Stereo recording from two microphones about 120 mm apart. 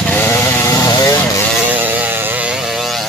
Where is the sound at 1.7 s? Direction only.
15° right (ahead or behind).